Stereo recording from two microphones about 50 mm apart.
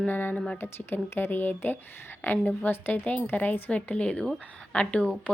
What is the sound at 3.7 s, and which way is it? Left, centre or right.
Speech, left.